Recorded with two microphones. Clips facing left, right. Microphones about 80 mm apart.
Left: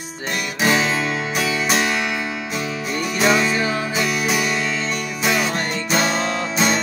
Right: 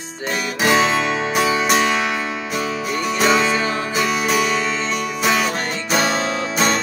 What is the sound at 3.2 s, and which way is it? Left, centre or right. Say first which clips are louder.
Music: right 1 dB; centre.